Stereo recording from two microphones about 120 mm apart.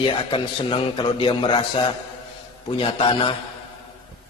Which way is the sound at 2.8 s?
45° left (ahead or behind).